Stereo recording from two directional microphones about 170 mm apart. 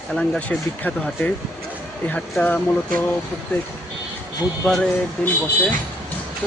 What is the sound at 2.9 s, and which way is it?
Speech, 55° right (ahead or behind).